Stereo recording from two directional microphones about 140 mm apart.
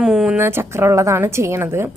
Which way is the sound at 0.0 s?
5° right (ahead or behind).